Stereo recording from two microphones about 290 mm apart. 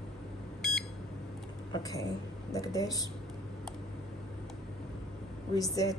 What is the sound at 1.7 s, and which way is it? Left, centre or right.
A woman's voice, centre.